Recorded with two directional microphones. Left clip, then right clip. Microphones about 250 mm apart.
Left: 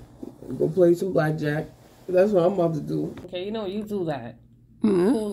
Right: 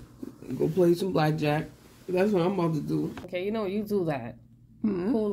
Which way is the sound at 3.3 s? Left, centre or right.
Right.